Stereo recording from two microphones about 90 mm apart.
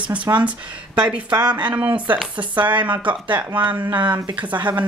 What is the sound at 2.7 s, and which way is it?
Speech, 60° right (ahead or behind).